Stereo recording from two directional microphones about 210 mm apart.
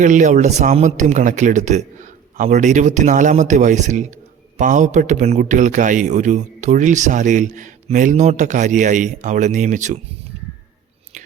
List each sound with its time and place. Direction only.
0.0 s a man's voice: 35° right (ahead or behind)